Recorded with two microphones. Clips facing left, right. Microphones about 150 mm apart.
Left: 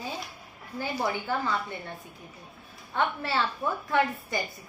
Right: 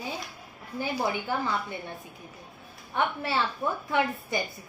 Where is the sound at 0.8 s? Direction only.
15° right (ahead or behind).